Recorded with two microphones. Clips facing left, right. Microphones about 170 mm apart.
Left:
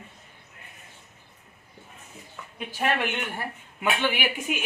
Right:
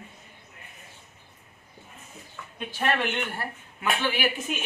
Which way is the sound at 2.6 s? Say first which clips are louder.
Even; 10° left (ahead or behind).